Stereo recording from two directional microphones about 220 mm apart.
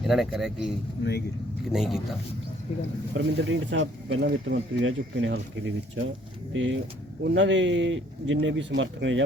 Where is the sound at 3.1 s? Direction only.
55° right (ahead or behind).